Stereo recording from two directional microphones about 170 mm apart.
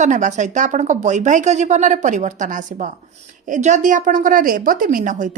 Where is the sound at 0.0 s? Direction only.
45° right (ahead or behind).